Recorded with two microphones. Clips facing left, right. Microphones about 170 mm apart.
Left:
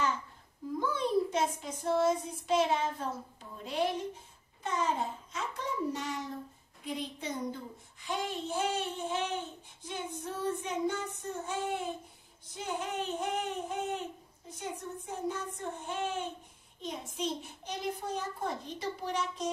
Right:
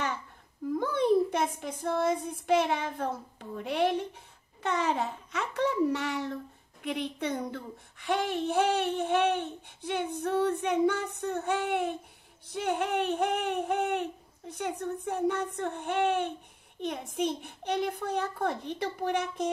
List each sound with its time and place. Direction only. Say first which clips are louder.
0.7 s a child's voice: right 5 dB; 60° right (ahead or behind)